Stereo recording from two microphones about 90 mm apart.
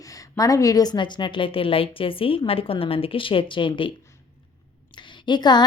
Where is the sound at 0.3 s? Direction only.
40° left (ahead or behind); by 3.7 s 70° left (ahead or behind).